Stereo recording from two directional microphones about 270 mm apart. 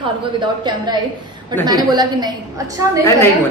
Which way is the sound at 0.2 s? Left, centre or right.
Centre.